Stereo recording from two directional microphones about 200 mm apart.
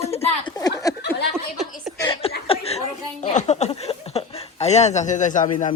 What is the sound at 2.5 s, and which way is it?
Chuckle, 30° left (ahead or behind).